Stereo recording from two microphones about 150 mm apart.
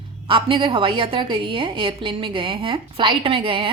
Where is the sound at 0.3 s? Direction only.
35° right (ahead or behind).